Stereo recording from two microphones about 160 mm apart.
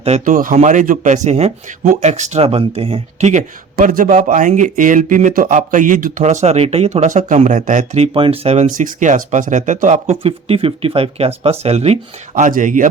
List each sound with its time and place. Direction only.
0.3 s speech: 55° right (ahead or behind)